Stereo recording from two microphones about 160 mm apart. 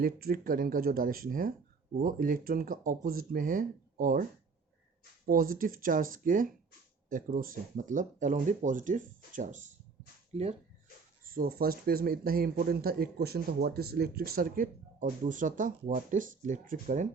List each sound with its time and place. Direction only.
0.0 s speech: 65° right (ahead or behind); by 9.7 s 50° right (ahead or behind)
11.2 s speech: 65° right (ahead or behind)